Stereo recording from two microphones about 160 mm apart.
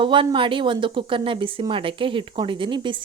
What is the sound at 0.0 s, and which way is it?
Speech, 30° right (ahead or behind).